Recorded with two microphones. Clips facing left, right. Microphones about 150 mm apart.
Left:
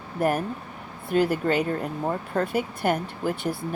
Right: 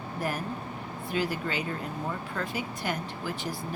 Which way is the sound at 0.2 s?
60° left (ahead or behind).